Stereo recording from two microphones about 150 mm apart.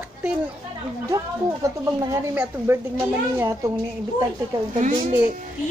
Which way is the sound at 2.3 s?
10° right (ahead or behind).